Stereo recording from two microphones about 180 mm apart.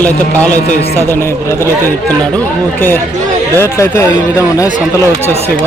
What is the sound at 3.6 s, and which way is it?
Speech, 15° left (ahead or behind).